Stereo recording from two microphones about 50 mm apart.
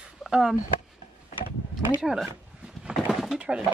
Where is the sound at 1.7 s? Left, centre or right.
Centre.